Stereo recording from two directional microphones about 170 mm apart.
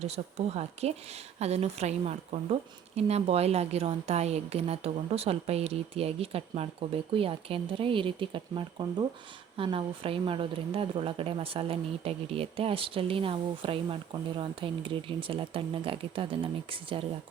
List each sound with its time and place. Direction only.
0.0 s speech: 40° right (ahead or behind)